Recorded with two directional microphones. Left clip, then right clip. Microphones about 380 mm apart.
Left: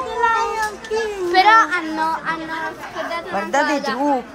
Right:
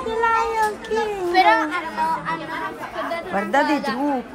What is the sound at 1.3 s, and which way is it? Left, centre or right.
A woman's voice, left.